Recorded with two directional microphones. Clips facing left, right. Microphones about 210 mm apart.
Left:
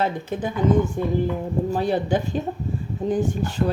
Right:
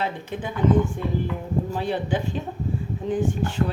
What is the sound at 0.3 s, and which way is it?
Dishes, 40° left (ahead or behind).